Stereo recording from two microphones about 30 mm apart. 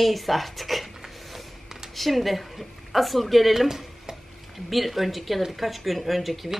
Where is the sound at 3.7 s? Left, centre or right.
Centre.